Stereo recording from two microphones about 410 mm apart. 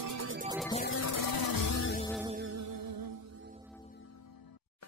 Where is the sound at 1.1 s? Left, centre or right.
Left.